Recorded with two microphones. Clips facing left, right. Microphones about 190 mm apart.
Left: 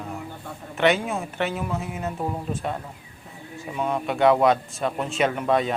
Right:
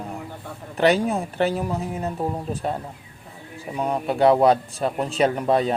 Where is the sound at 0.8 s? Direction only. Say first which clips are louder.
Right 3 dB; 35° right (ahead or behind).